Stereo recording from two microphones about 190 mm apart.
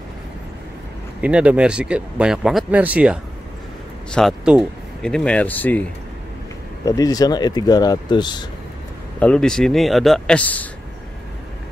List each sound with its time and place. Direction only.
1.2 s speech: 5° right (ahead or behind); by 8.5 s 25° left (ahead or behind)
9.2 s speech: 5° left (ahead or behind)